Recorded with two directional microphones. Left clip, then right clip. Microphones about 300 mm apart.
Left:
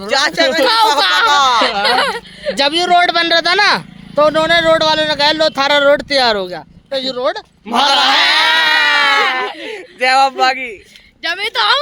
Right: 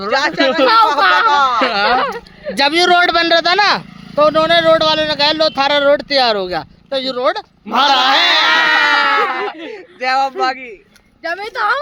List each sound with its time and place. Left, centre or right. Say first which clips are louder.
0.1 s speech: left 1 dB; left
2.6 s speech: right 1 dB; centre
2.9 s speech: left 3 dB; right
3.2 s speech: even; centre
8.2 s a sound: even; left
9.3 s a sound: left 2 dB; centre
9.6 s a man's voice: left 4 dB; left